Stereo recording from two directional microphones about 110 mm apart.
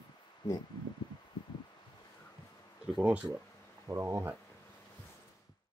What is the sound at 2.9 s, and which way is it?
Speech, 10° right (ahead or behind).